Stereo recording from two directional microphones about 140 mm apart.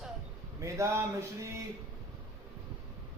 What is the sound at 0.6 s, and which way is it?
Speech, 20° right (ahead or behind).